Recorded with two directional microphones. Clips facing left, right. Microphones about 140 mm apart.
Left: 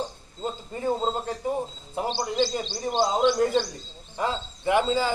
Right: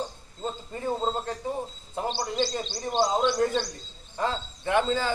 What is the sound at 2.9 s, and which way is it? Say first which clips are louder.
Speech: left 1 dB; 20° left (ahead or behind).